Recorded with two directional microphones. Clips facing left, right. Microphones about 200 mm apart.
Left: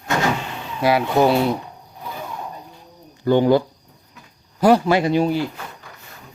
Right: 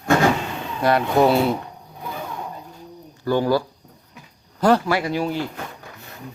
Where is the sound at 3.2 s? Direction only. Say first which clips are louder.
Left 4 dB; 20° left (ahead or behind).